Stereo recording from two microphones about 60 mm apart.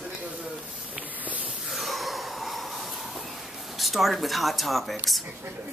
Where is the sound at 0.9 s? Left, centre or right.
Right.